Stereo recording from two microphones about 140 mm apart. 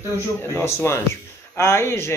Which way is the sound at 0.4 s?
20° left (ahead or behind).